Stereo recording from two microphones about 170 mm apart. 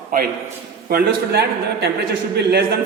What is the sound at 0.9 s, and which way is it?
Speech, 70° right (ahead or behind).